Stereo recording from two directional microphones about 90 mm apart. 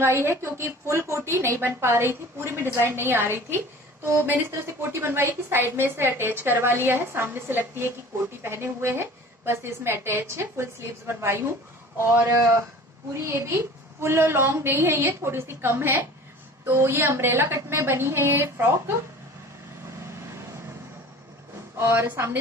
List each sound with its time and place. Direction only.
0.0 s a woman's voice: 30° right (ahead or behind)
21.7 s a woman's voice: 25° right (ahead or behind)